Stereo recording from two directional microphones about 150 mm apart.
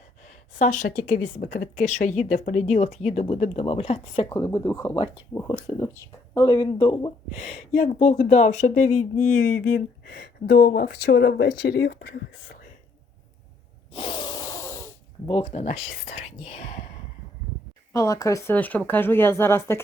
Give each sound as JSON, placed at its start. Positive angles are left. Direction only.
{"t": 0.6, "sound": "a woman's voice", "side_deg": 60}
{"t": 4.4, "sound": "speech", "side_deg": 25}
{"t": 7.3, "sound": "speech", "side_deg": 50}
{"t": 13.9, "sound": "snort", "side_deg": 35}
{"t": 14.3, "sound": "a sound", "side_deg": 20}
{"t": 15.3, "sound": "speech", "side_deg": 35}
{"t": 15.5, "sound": "a woman's voice", "side_deg": 50}
{"t": 17.9, "sound": "speech", "side_deg": 20}